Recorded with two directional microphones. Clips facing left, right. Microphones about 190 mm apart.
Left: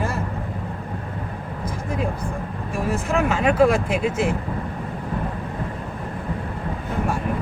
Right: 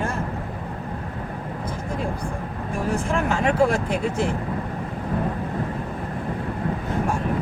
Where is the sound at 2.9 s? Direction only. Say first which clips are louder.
Left 2 dB; 5° left (ahead or behind).